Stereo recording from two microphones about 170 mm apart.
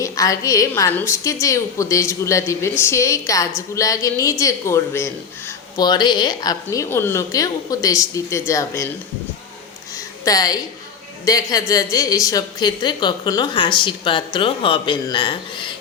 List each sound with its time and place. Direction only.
0.0 s a woman's voice: 20° left (ahead or behind)
9.9 s a sound: 20° left (ahead or behind)
11.3 s a woman's voice: 20° left (ahead or behind)